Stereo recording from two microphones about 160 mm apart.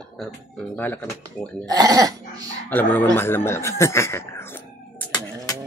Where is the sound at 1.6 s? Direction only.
25° right (ahead or behind).